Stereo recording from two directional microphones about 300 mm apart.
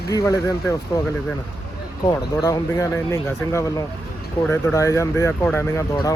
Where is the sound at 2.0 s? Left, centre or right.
Centre.